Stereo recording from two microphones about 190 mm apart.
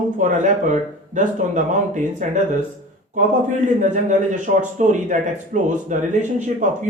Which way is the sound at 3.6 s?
40° right (ahead or behind).